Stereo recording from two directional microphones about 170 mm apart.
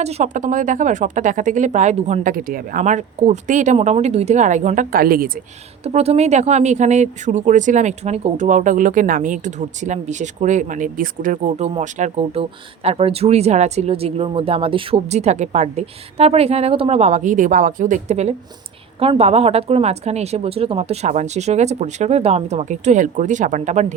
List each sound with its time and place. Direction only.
0.0 s speech: 40° right (ahead or behind); by 5.3 s 60° right (ahead or behind)
5.8 s a woman's voice: 40° right (ahead or behind)